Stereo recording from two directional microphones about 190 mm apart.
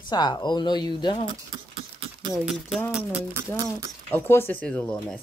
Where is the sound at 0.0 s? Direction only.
20° left (ahead or behind).